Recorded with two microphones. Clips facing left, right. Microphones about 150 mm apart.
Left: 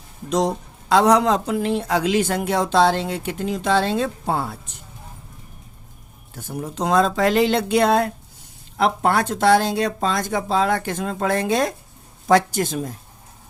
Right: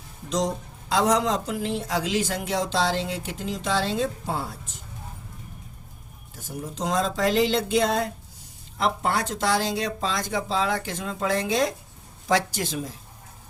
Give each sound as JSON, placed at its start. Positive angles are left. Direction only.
{"t": 0.3, "sound": "speech", "side_deg": 60}
{"t": 6.3, "sound": "speech", "side_deg": 65}